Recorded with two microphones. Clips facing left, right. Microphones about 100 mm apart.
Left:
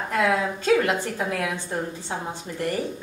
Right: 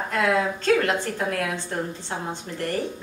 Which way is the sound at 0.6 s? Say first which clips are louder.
Even; 10° left (ahead or behind).